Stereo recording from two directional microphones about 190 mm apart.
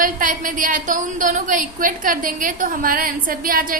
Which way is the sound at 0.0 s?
45° right (ahead or behind).